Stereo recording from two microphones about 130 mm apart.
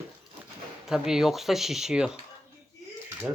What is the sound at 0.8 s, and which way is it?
Speech, 5° right (ahead or behind).